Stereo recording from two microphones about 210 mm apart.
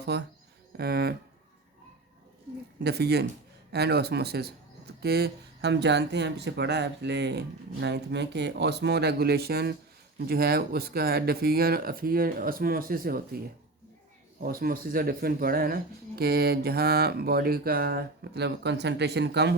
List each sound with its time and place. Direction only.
0.1 s a man's voice: 50° right (ahead or behind)
2.8 s a man's voice: 50° right (ahead or behind)
14.4 s a man's voice: 45° right (ahead or behind)